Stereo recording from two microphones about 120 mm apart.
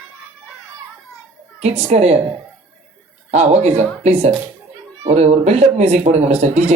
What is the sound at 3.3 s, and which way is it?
Speech, 60° right (ahead or behind).